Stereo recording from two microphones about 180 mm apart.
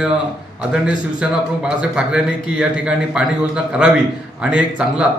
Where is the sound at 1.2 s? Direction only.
5° right (ahead or behind).